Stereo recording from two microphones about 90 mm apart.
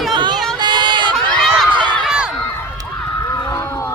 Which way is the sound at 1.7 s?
60° right (ahead or behind).